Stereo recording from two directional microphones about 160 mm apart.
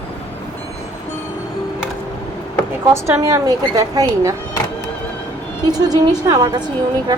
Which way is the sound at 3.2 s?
20° right (ahead or behind).